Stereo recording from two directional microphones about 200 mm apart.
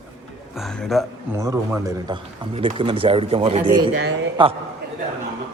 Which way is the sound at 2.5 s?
30° right (ahead or behind).